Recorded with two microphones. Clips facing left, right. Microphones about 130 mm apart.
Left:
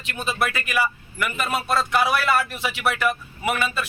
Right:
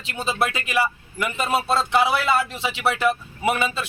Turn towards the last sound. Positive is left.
turn(degrees=-25)  # may be behind; listen again after turning